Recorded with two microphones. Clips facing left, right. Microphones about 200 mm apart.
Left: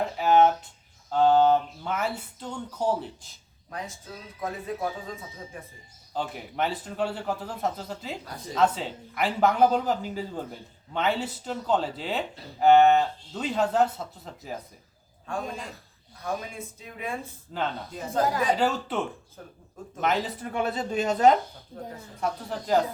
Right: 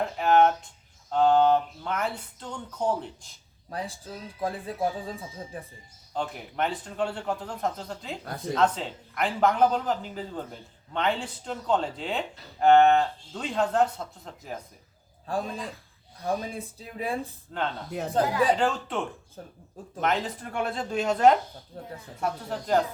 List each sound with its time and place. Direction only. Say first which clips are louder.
0.2 s a sound: left 1 dB; 5° left (ahead or behind)
1.1 s speech: left 1 dB; centre (ahead or behind)
3.7 s speech: right 2 dB; 30° right (ahead or behind)
6.1 s speech: even; 5° left (ahead or behind)
15.3 s speech: right 2 dB; 35° right (ahead or behind)
17.5 s speech: even; 5° left (ahead or behind)
19.4 s speech: right 4 dB; 30° right (ahead or behind)
20.0 s speech: left 1 dB; 5° left (ahead or behind)